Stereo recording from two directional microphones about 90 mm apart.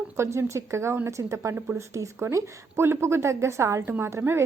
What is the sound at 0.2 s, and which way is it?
Speech, 30° right (ahead or behind).